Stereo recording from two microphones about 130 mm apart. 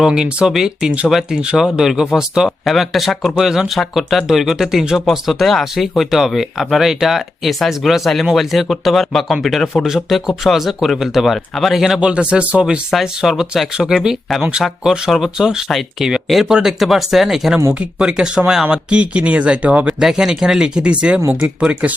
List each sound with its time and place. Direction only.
0.0 s speech: 5° right (ahead or behind)
21.2 s speech: 20° right (ahead or behind)
21.6 s speech: 10° right (ahead or behind)